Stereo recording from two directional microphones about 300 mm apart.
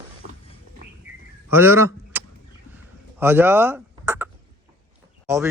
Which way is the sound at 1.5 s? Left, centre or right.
Centre.